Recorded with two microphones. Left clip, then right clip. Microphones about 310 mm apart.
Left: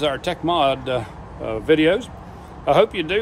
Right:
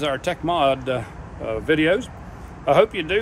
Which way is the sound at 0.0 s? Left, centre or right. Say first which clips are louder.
Left 1 dB; centre.